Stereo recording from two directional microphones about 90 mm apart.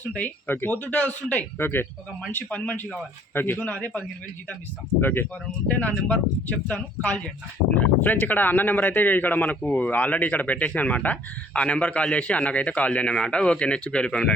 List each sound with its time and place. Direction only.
0.0 s speech: 15° left (ahead or behind)